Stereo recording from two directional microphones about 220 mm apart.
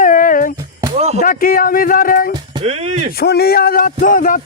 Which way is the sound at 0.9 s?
30° right (ahead or behind).